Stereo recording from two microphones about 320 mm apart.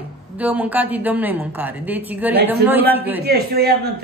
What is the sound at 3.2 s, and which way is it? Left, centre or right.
Speech, right.